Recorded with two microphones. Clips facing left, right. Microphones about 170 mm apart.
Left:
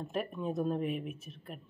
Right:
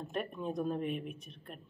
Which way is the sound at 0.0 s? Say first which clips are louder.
Left 2 dB; centre (ahead or behind).